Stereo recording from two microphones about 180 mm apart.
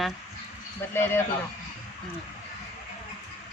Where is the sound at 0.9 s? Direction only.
15° left (ahead or behind).